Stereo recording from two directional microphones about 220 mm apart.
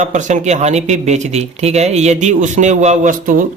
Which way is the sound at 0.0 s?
35° right (ahead or behind).